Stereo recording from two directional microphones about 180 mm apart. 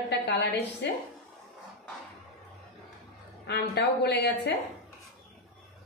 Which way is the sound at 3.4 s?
65° left (ahead or behind).